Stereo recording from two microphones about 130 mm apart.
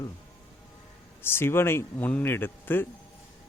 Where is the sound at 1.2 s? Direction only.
15° left (ahead or behind).